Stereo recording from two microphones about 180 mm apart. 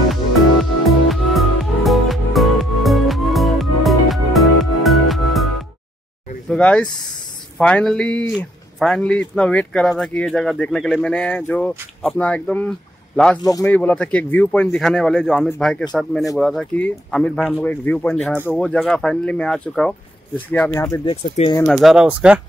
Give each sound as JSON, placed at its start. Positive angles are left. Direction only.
{"t": 0.8, "sound": "music", "side_deg": 0}
{"t": 6.5, "sound": "speech", "side_deg": 5}
{"t": 13.4, "sound": "speech", "side_deg": 20}
{"t": 13.7, "sound": "speech", "side_deg": 10}
{"t": 21.0, "sound": "speech", "side_deg": 30}
{"t": 21.6, "sound": "speech", "side_deg": 0}